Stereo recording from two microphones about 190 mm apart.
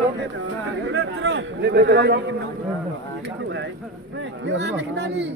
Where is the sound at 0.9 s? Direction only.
65° right (ahead or behind).